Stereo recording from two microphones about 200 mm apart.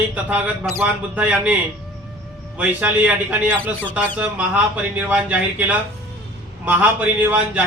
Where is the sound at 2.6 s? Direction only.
5° right (ahead or behind).